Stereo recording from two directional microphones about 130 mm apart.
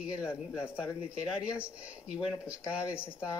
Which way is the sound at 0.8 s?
20° left (ahead or behind).